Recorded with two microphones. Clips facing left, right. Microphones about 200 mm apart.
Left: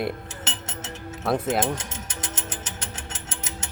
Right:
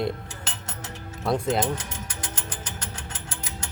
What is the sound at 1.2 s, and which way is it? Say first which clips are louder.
Speech: even; 5° left (ahead or behind).